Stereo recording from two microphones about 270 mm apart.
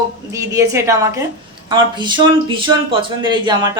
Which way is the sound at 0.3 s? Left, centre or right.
Centre.